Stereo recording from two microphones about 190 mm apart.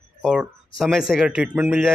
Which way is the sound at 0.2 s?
5° right (ahead or behind).